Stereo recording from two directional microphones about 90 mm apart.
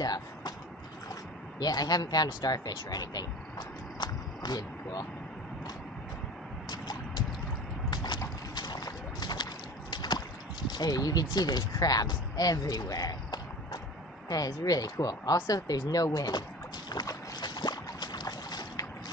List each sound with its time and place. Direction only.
0.0 s vehicle: 50° left (ahead or behind)
1.6 s speech: 45° left (ahead or behind)
6.7 s music: 50° left (ahead or behind)
7.9 s clip-clop: 50° left (ahead or behind)
8.5 s a sound: 50° left (ahead or behind)
10.7 s speech: 45° left (ahead or behind)
16.9 s boat: 50° left (ahead or behind)